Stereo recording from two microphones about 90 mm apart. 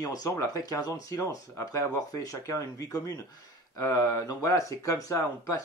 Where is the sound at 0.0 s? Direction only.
40° left (ahead or behind).